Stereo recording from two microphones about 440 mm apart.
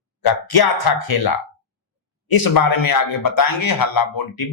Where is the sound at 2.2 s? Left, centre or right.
Left.